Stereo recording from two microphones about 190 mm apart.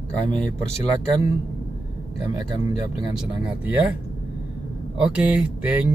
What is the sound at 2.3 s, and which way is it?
Speech, 20° right (ahead or behind).